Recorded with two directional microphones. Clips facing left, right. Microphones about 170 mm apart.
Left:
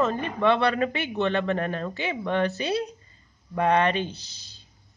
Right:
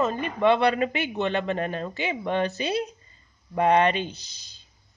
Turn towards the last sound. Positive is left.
turn(degrees=-15)  # may be behind; listen again after turning